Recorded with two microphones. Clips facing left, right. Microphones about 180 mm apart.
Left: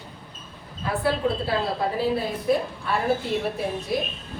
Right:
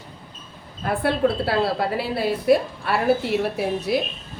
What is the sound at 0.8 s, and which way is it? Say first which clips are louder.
A woman's voice: right 3 dB; 70° right (ahead or behind).